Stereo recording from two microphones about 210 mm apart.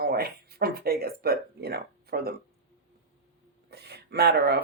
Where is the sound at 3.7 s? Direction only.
50° right (ahead or behind).